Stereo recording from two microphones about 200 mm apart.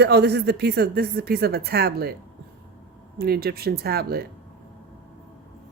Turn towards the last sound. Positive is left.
turn(degrees=-50)  # may be behind; listen again after turning